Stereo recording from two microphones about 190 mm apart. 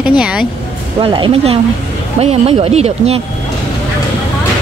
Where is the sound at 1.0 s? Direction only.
25° right (ahead or behind).